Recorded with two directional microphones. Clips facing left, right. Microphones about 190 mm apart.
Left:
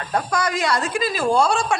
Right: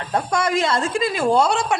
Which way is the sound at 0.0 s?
25° right (ahead or behind).